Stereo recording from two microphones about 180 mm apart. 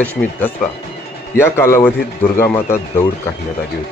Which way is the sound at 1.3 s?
15° left (ahead or behind).